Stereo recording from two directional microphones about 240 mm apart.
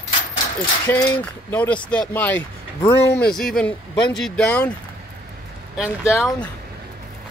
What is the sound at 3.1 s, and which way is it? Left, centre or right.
Speech, left.